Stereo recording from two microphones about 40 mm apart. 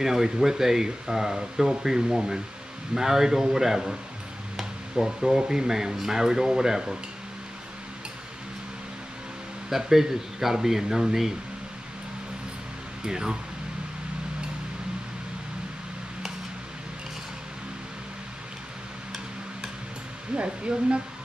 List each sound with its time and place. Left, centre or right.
0.0 s speech: centre
9.7 s speech: centre
13.0 s speech: centre
20.3 s speech: right